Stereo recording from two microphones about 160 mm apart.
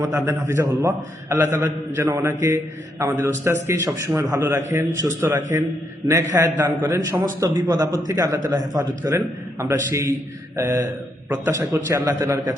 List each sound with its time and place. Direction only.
0.0 s a man's voice: 15° right (ahead or behind)